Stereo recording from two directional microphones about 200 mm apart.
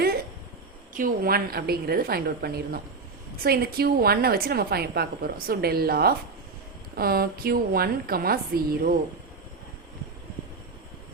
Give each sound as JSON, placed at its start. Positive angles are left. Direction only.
{"t": 0.9, "sound": "a woman's voice", "side_deg": -45}